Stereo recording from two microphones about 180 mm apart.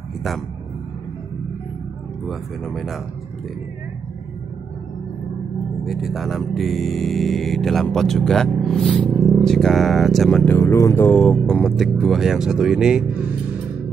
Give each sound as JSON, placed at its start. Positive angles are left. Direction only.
{"t": 2.2, "sound": "speech", "side_deg": 0}
{"t": 5.9, "sound": "speech", "side_deg": 0}
{"t": 10.6, "sound": "speech", "side_deg": 20}
{"t": 11.1, "sound": "speech", "side_deg": 5}